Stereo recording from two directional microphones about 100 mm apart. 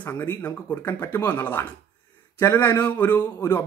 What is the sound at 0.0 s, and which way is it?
Speech, 20° left (ahead or behind).